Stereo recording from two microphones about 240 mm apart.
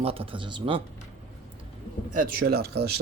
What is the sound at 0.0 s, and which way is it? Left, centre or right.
Speech, right.